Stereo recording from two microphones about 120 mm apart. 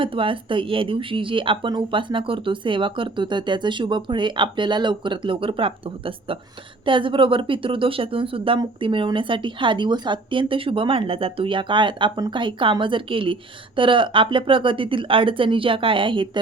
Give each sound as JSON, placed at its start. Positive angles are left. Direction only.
{"t": 0.0, "sound": "a woman's voice", "side_deg": -45}